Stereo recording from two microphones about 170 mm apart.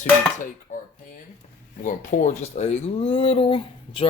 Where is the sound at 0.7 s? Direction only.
50° left (ahead or behind).